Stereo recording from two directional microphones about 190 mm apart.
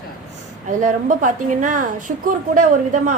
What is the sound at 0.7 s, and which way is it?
A woman's voice, 40° right (ahead or behind).